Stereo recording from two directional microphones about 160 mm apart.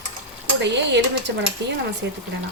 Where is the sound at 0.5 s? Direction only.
90° right.